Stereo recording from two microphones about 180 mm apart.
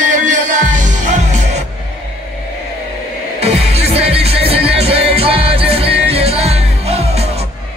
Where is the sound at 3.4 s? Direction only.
35° right (ahead or behind).